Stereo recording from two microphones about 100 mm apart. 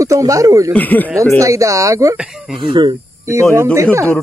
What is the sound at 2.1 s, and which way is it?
Speech, 10° right (ahead or behind).